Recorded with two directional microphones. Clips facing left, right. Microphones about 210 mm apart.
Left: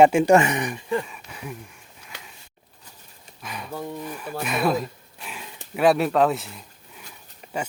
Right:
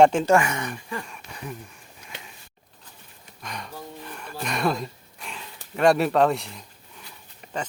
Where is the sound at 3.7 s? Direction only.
60° left (ahead or behind).